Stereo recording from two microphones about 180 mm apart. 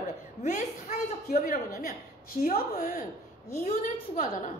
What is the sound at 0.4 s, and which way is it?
Speech, 40° left (ahead or behind).